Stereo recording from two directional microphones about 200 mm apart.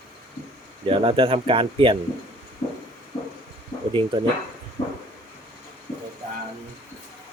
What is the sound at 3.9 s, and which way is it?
Speech, 25° right (ahead or behind).